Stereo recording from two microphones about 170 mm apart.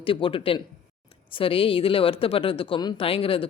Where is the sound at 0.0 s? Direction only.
30° left (ahead or behind).